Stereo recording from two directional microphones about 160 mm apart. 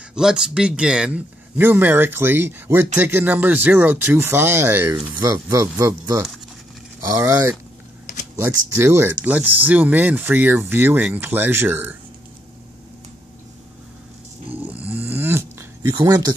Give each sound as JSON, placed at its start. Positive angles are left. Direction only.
{"t": 0.1, "sound": "speech", "side_deg": -5}
{"t": 14.5, "sound": "snoring", "side_deg": -10}